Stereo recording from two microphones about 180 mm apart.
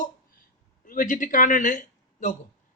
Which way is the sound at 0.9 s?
45° left (ahead or behind).